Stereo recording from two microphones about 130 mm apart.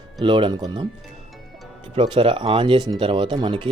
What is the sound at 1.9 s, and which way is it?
Speech, 40° right (ahead or behind).